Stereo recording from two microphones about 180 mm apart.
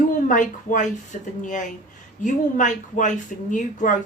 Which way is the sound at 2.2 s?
45° left (ahead or behind).